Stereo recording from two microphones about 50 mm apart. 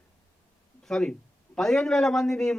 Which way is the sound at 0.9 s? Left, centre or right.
Centre.